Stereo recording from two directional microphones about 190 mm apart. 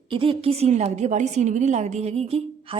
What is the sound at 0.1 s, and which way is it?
A woman's voice, 30° right (ahead or behind).